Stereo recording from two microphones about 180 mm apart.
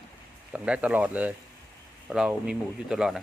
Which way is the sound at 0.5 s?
5° right (ahead or behind).